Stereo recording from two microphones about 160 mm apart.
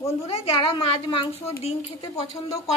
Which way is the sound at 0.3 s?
35° left (ahead or behind).